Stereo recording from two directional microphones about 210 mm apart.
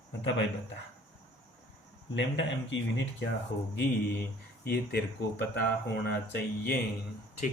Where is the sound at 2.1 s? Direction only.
60° left (ahead or behind).